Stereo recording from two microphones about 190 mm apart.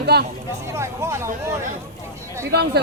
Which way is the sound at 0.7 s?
15° right (ahead or behind).